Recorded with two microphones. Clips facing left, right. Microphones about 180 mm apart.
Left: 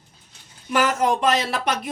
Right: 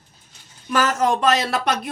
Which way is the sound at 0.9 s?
40° right (ahead or behind).